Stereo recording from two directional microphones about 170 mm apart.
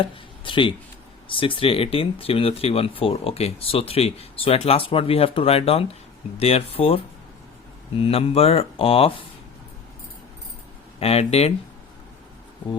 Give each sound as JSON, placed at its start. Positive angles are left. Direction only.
{"t": 0.0, "sound": "a sound", "side_deg": 30}
{"t": 1.3, "sound": "speech", "side_deg": 30}
{"t": 8.0, "sound": "speech", "side_deg": 35}
{"t": 11.0, "sound": "speech", "side_deg": 35}